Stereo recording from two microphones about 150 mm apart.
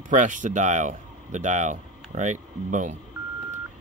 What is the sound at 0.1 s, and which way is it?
Speech, 55° right (ahead or behind).